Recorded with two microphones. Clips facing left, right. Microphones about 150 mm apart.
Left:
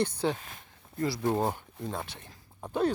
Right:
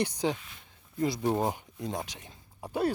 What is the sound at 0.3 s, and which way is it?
Speech, 45° left (ahead or behind).